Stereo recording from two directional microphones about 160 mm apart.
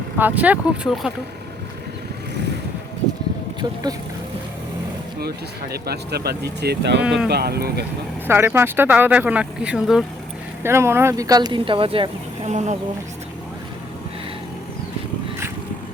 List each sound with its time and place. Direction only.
0.2 s speech: 10° right (ahead or behind)
5.2 s speech: 80° right
7.0 s speech: 5° right (ahead or behind)
7.3 s speech: 90° right
8.3 s speech: 15° right (ahead or behind)
10.6 s speech: 15° right (ahead or behind); by 12.1 s 35° right (ahead or behind)
12.5 s speech: 45° right (ahead or behind)